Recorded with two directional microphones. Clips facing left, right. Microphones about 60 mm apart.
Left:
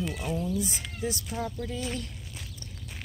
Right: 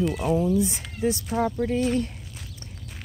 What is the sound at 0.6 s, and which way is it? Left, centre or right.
Speech, right.